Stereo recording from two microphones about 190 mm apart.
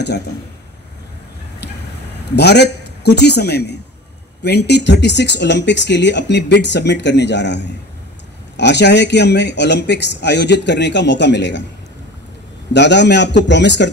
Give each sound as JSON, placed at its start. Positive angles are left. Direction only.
{"t": 2.3, "sound": "speech", "side_deg": 60}
{"t": 12.7, "sound": "speech", "side_deg": 65}